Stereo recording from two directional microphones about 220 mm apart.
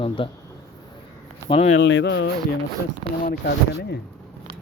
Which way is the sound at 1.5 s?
25° left (ahead or behind).